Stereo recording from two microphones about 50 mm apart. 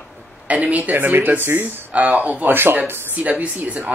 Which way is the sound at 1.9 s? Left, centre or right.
Right.